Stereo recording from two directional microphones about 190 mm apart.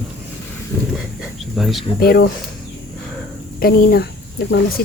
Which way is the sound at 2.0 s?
55° left (ahead or behind).